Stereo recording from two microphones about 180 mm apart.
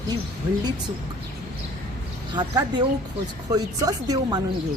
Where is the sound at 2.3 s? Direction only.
20° right (ahead or behind).